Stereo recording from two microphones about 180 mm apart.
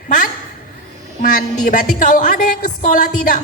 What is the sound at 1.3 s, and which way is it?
Music, 45° left (ahead or behind).